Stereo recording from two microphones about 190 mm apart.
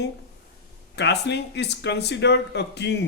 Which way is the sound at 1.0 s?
65° left (ahead or behind).